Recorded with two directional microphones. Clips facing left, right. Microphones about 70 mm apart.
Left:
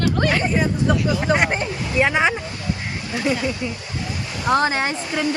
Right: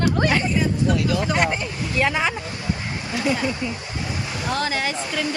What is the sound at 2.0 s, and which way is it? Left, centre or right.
Speech, centre.